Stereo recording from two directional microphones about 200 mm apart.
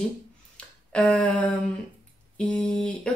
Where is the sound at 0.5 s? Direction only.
5° left (ahead or behind).